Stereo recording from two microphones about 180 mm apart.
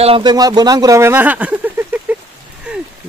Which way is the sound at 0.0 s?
30° right (ahead or behind).